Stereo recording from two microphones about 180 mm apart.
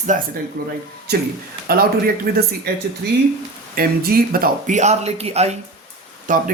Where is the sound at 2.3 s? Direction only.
55° right (ahead or behind).